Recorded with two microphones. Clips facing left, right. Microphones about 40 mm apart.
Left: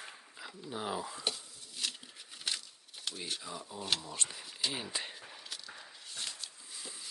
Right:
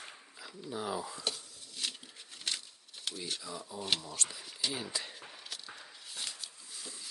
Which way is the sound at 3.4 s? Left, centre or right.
Centre.